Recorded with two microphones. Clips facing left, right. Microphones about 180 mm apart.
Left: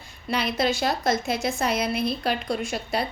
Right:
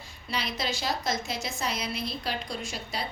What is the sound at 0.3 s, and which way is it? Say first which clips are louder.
A woman's voice: left 8 dB; 60° left (ahead or behind).